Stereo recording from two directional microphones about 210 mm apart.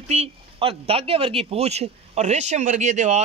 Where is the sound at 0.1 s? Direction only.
25° right (ahead or behind).